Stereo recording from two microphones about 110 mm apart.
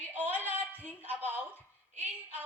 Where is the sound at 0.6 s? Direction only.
15° left (ahead or behind).